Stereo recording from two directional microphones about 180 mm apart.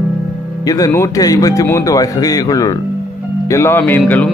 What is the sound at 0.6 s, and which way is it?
Speech, 20° left (ahead or behind).